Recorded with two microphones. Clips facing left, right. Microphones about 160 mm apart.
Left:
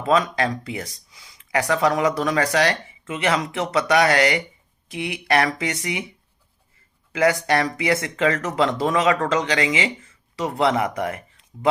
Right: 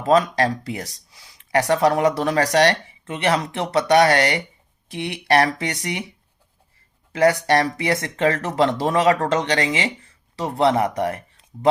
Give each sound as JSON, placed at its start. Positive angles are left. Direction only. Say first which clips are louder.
{"t": 0.0, "sound": "speech", "louder": "right 3 dB", "side_deg": -35}
{"t": 7.2, "sound": "speech", "louder": "right 2 dB", "side_deg": -35}